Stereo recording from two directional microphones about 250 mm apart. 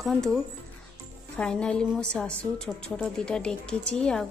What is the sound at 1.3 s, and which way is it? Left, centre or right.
A woman's voice, centre.